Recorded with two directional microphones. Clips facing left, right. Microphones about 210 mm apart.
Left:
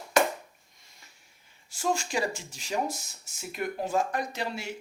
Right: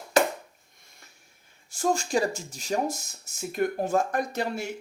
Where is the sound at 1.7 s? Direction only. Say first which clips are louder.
Right 4 dB; 45° right (ahead or behind).